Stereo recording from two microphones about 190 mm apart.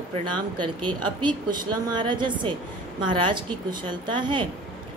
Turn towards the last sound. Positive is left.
turn(degrees=-25)  # may be behind; listen again after turning